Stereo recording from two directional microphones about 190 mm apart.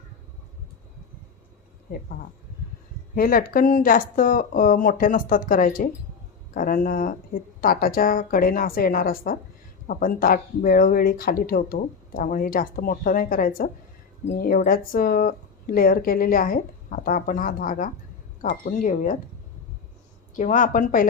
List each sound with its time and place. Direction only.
3.2 s speech: 50° left (ahead or behind)
20.3 s speech: 40° left (ahead or behind)